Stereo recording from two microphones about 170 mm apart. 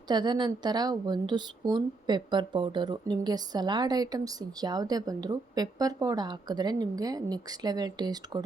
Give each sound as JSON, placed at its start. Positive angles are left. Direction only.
{"t": 0.1, "sound": "a woman's voice", "side_deg": -25}